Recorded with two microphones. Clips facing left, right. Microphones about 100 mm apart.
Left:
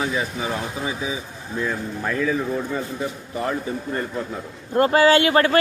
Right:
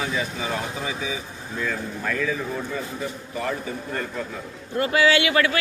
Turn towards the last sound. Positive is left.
turn(degrees=40)  # may be behind; listen again after turning